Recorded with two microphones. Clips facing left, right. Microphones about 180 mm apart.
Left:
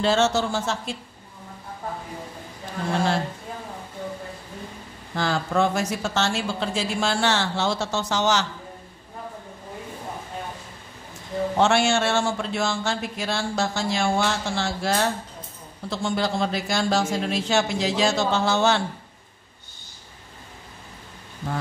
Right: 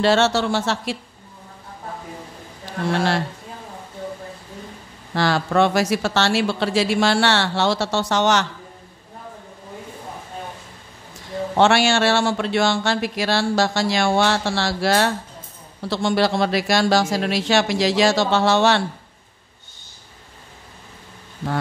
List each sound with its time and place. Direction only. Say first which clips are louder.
0.0 s a man's voice: right 3 dB; 75° right (ahead or behind)
2.6 s a man's voice: right 3 dB; 80° right
5.1 s a man's voice: right 4 dB; 75° right (ahead or behind)
11.5 s a man's voice: right 4 dB; 75° right (ahead or behind)